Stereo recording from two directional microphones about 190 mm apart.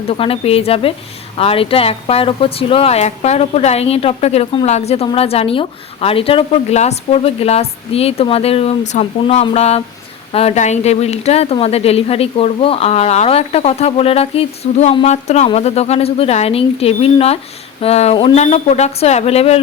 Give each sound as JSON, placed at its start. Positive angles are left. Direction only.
{"t": 0.1, "sound": "speech", "side_deg": 30}